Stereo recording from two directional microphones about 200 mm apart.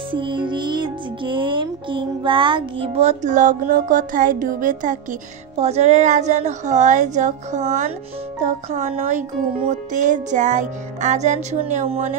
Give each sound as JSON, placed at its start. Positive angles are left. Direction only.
{"t": 0.1, "sound": "music", "side_deg": -25}